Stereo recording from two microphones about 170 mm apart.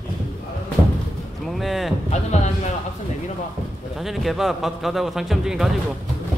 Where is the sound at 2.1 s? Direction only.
40° left (ahead or behind).